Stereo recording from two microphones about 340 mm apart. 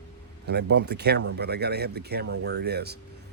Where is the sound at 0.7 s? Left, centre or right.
Right.